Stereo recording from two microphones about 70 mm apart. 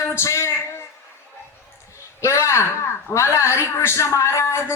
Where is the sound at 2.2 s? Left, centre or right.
Left.